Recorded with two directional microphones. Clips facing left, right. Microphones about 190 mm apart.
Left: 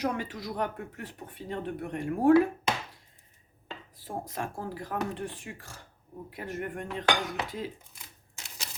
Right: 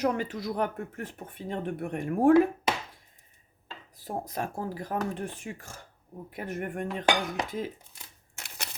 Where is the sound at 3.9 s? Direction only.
45° right (ahead or behind).